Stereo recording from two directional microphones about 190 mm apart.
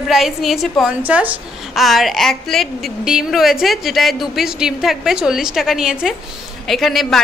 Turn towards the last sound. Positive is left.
turn(degrees=0)  # may be behind; listen again after turning